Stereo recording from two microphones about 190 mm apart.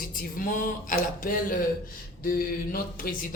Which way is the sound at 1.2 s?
50° left (ahead or behind).